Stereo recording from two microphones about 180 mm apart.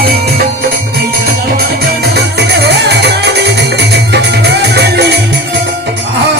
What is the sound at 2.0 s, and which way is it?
Music, 65° right (ahead or behind).